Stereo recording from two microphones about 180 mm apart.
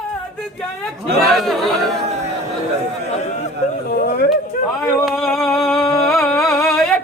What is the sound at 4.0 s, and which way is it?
Speech, 60° left (ahead or behind).